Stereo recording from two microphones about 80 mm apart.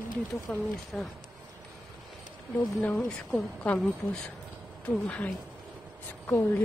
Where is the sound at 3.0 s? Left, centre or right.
Centre.